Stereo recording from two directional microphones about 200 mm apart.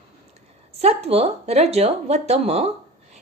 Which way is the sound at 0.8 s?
30° right (ahead or behind).